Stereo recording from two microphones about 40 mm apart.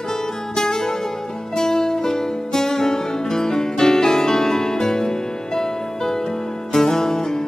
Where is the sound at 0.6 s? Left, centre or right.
Centre.